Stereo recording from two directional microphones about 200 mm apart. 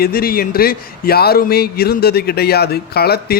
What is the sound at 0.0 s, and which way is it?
A man's voice, 50° left (ahead or behind).